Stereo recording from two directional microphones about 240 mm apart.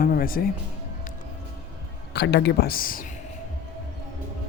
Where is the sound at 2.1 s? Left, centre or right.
Left.